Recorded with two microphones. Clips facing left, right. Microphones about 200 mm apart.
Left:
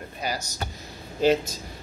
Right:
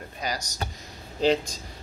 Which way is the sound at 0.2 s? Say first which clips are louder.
Left 1 dB; 5° left (ahead or behind).